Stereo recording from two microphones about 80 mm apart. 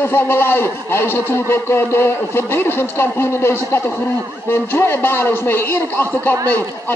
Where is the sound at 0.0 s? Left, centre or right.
Left.